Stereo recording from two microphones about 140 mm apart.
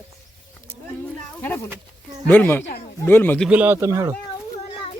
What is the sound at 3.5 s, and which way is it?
Speech, 10° right (ahead or behind).